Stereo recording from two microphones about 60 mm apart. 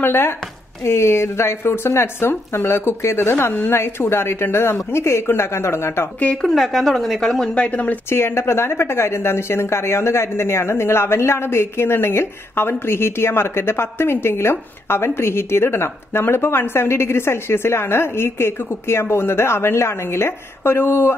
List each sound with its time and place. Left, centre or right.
0.0 s speech: left
6.3 s a woman's voice: centre; by 8.0 s left
8.1 s speech: left